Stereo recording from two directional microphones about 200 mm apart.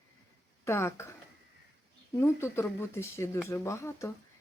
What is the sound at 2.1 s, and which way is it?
Speech, 15° left (ahead or behind).